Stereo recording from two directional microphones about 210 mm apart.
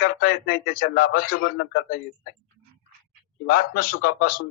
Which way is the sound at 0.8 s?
85° left.